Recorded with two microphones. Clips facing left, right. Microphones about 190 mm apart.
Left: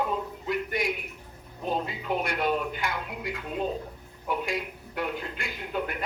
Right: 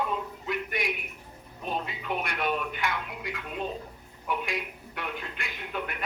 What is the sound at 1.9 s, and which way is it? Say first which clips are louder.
A man's voice: left 3 dB; 35° left (ahead or behind).